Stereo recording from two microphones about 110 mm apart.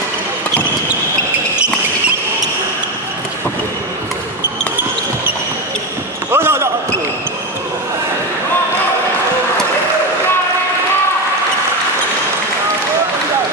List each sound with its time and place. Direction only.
6.3 s basketball bounce: 25° right (ahead or behind)